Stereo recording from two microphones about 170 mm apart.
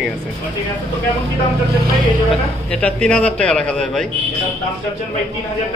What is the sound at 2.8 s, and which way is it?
A man's voice, 5° left (ahead or behind).